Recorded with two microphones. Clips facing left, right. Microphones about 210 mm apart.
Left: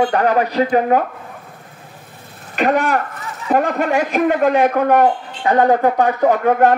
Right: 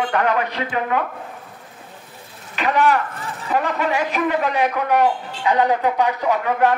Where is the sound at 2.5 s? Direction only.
50° left (ahead or behind).